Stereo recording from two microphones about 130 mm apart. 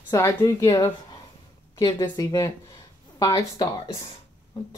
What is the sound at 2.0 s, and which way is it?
A woman's voice, 25° left (ahead or behind).